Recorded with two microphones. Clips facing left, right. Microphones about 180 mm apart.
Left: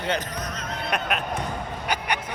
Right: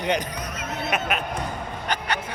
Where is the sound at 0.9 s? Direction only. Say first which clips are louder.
Right 1 dB; centre (ahead or behind).